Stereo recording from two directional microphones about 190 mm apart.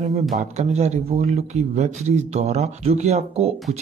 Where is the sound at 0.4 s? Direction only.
35° right (ahead or behind).